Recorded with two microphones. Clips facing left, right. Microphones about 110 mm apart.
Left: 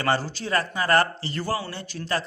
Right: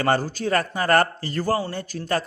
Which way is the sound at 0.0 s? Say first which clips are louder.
Right 3 dB; 45° right (ahead or behind).